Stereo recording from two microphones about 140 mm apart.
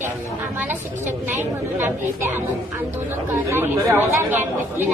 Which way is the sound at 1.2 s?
15° right (ahead or behind).